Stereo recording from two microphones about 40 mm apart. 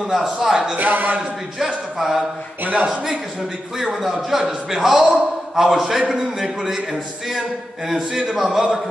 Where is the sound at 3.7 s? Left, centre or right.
Centre.